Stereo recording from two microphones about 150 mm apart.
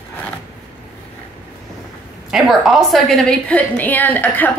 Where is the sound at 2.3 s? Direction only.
Centre (ahead or behind).